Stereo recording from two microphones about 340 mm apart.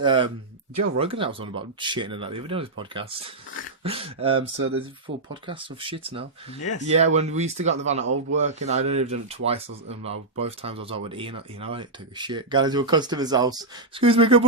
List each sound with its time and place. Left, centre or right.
0.0 s speech: centre
8.0 s a man's voice: right
8.4 s speech: centre